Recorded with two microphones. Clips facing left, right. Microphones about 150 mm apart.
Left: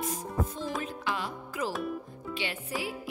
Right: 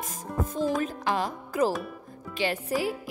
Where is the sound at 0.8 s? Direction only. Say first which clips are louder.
Right 6 dB; 40° right (ahead or behind).